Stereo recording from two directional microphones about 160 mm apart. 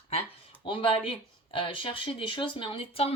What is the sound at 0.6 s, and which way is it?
Speech, 30° left (ahead or behind).